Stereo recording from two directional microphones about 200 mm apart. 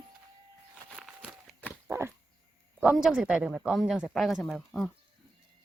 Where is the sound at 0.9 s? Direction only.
Centre (ahead or behind).